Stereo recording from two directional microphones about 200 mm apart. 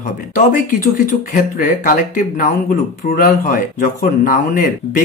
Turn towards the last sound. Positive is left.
turn(degrees=40)  # may be behind; listen again after turning